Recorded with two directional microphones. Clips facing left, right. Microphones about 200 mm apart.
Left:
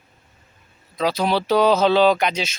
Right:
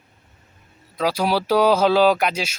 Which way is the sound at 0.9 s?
10° right (ahead or behind).